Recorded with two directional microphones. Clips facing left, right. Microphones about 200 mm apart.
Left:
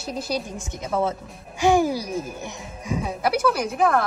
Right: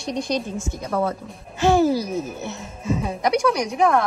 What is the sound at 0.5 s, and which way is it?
Speech, 20° left (ahead or behind).